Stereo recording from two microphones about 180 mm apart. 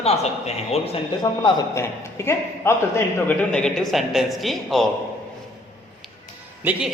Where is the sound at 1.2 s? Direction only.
20° left (ahead or behind); by 4.8 s centre (ahead or behind).